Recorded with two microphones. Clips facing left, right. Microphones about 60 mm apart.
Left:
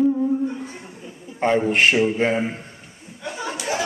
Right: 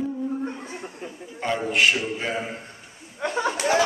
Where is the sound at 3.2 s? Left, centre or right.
Right.